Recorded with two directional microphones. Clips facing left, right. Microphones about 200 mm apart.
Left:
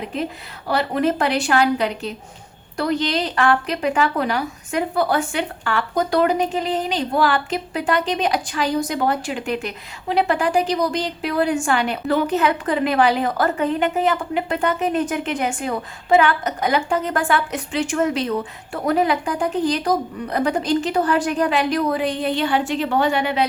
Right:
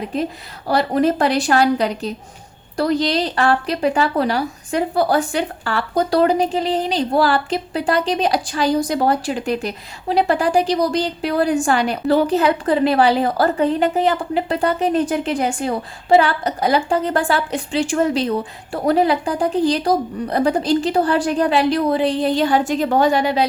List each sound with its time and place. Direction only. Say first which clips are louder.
0.7 s a woman's voice: right 3 dB; 35° right (ahead or behind)